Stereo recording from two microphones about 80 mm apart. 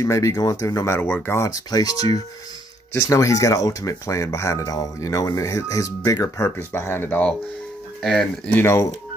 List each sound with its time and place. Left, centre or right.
0.0 s speech: left
1.5 s speech: left
6.7 s speech: left
8.0 s speech: centre
8.5 s speech: left